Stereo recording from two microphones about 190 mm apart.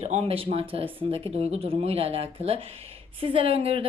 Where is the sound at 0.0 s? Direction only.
35° right (ahead or behind).